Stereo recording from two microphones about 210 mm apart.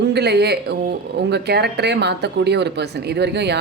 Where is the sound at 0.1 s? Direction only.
50° right (ahead or behind).